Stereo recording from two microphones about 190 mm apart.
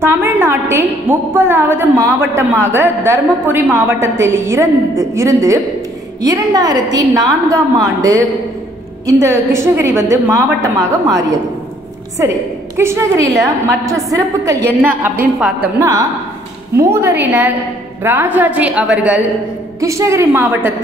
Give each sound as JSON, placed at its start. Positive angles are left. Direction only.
{"t": 0.0, "sound": "a woman's voice", "side_deg": -10}
{"t": 16.7, "sound": "a woman's voice", "side_deg": -15}